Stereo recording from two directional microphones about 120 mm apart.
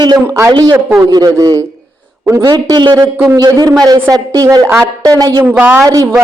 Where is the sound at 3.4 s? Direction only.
35° right (ahead or behind).